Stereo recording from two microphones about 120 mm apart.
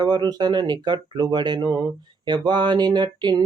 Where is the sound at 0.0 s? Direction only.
35° right (ahead or behind).